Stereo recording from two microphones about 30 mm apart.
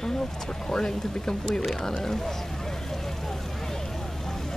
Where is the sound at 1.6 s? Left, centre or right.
Centre.